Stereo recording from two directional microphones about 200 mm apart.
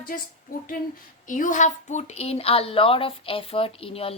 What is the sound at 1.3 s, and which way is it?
A woman's voice, 40° left (ahead or behind).